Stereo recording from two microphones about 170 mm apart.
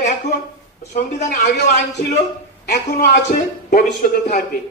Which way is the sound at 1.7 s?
40° left (ahead or behind).